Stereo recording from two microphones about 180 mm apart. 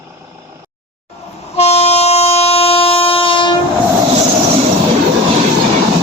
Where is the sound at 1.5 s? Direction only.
35° left (ahead or behind).